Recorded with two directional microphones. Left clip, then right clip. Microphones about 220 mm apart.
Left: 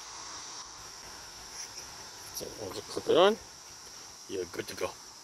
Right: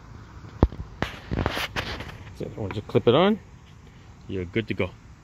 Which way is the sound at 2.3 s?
5° left (ahead or behind).